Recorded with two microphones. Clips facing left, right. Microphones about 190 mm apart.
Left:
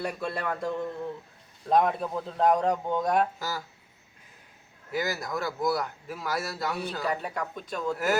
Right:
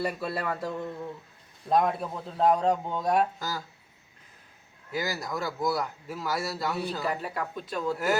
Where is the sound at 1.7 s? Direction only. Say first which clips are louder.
Left 1 dB; centre (ahead or behind).